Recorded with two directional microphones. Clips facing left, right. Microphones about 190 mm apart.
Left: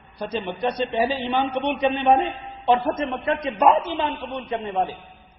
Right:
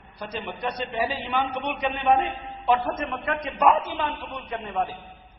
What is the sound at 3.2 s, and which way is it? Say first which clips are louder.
A man's voice: left 3 dB; 25° left (ahead or behind).